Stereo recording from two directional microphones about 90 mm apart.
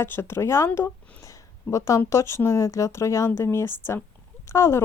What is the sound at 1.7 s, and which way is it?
Speech, 35° left (ahead or behind).